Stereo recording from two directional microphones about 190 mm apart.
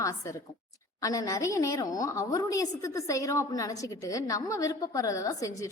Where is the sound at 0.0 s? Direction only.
15° left (ahead or behind).